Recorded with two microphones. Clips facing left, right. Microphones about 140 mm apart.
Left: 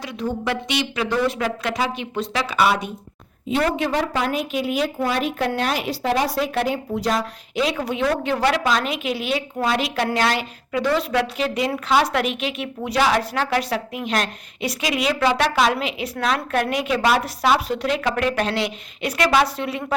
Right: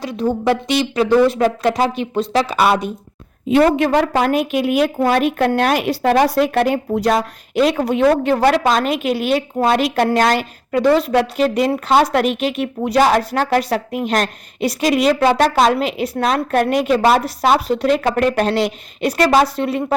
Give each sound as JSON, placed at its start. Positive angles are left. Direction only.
{"t": 0.0, "sound": "speech", "side_deg": -35}
{"t": 3.8, "sound": "a woman's voice", "side_deg": -60}